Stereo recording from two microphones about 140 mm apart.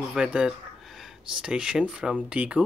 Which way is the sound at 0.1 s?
5° right (ahead or behind).